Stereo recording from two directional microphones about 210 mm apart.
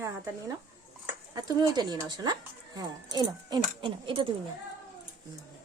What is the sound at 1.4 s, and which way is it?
Speech, 20° right (ahead or behind).